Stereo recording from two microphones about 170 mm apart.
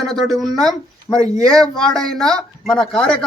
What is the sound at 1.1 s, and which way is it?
Speech, 25° left (ahead or behind).